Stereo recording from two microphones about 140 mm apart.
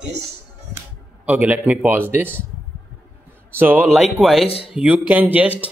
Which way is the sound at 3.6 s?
10° right (ahead or behind).